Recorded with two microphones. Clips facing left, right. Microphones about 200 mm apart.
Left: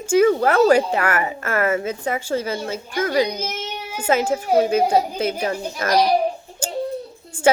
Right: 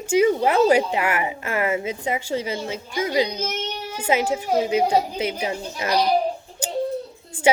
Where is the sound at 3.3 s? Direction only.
10° left (ahead or behind).